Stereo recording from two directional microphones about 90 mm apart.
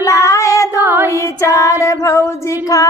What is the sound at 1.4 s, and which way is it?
Child singing, 35° left (ahead or behind).